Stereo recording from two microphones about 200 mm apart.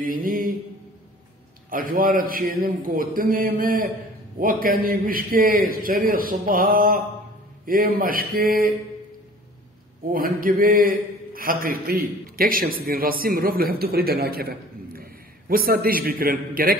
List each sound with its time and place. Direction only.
0.0 s mantra: 45° right (ahead or behind)
1.7 s a man's voice: 45° right (ahead or behind)
10.1 s a man's voice: 45° right (ahead or behind)